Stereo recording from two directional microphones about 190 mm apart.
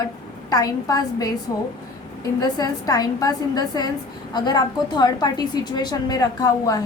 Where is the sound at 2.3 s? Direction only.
20° left (ahead or behind).